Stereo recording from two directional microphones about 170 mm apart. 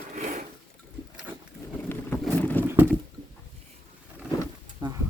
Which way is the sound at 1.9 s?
10° left (ahead or behind).